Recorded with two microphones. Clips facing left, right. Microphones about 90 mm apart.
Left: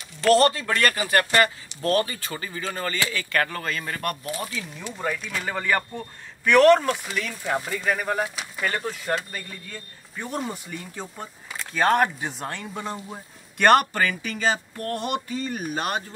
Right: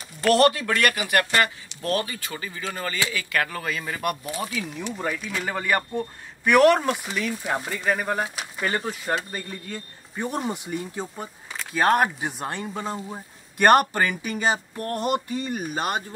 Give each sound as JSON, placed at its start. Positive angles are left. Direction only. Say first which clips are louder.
{"t": 0.2, "sound": "speech", "louder": "even", "side_deg": -10}